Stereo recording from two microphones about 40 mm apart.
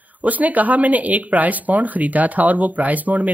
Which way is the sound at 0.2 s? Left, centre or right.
Right.